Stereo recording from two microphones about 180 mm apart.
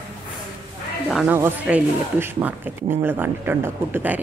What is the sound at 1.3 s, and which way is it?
Speech, 10° right (ahead or behind).